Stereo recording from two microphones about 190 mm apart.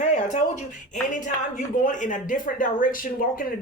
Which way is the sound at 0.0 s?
40° left (ahead or behind).